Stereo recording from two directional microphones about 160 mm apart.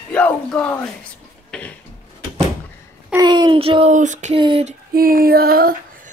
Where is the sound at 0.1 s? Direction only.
5° left (ahead or behind).